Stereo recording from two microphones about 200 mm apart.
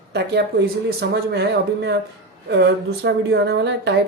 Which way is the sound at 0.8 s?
55° right (ahead or behind).